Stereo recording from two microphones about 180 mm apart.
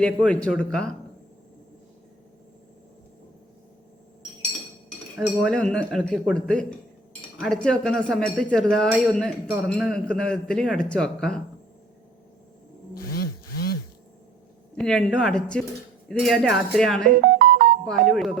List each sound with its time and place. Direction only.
0.0 s a man's voice: 5° left (ahead or behind)
5.1 s speech: 5° right (ahead or behind)
5.5 s a man's voice: 5° left (ahead or behind)
12.9 s a sound: 55° left (ahead or behind)
14.8 s a man's voice: 5° left (ahead or behind)
17.2 s music: 60° right (ahead or behind)
17.8 s a man's voice: 5° left (ahead or behind)